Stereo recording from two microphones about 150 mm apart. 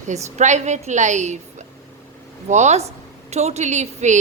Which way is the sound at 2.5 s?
50° right (ahead or behind).